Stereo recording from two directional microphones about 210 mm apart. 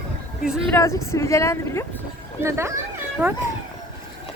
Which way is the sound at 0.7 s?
15° left (ahead or behind).